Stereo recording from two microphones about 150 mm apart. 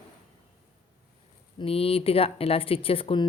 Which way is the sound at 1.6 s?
40° left (ahead or behind).